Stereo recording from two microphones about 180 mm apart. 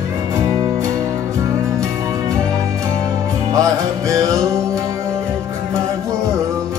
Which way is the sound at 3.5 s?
20° right (ahead or behind).